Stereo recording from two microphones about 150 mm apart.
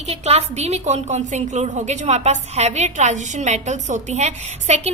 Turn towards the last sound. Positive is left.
turn(degrees=-45)  # may be behind; listen again after turning